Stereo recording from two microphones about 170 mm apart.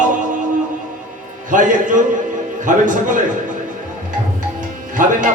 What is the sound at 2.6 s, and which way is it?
Music, 50° right (ahead or behind).